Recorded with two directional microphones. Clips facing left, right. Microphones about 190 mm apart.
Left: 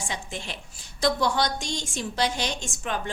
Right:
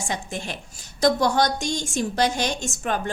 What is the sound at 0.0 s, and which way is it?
A woman's voice, 45° right (ahead or behind).